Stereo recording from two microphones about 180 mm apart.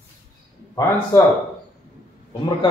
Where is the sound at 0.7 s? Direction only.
15° left (ahead or behind).